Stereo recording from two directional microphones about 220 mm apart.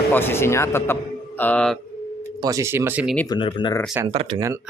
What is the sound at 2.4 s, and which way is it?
Speech, 15° right (ahead or behind).